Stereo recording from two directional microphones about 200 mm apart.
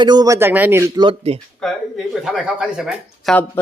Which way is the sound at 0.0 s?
20° right (ahead or behind).